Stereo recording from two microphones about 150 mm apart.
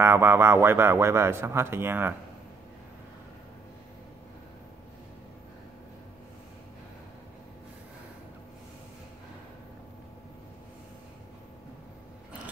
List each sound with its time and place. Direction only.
0.0 s speech: 15° right (ahead or behind)